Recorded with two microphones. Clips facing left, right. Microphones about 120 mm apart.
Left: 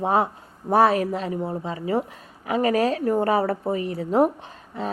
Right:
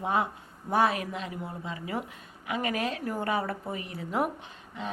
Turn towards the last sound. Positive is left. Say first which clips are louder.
# left 7 dB
turn(degrees=35)  # may be behind; listen again after turning